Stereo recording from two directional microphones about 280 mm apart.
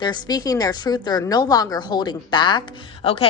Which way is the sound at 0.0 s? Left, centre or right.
Centre.